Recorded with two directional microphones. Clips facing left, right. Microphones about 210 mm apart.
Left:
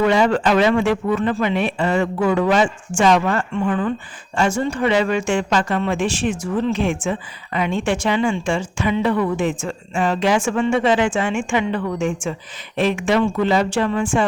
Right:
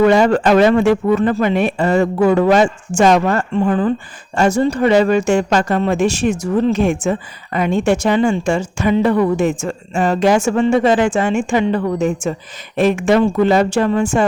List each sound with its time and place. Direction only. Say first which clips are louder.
0.0 s a man's voice: right 5 dB; 45° right (ahead or behind)